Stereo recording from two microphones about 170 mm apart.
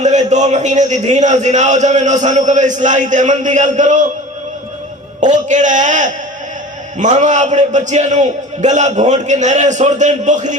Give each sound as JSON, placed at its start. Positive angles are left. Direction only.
{"t": 0.0, "sound": "a man's voice", "side_deg": -45}
{"t": 5.2, "sound": "a man's voice", "side_deg": -45}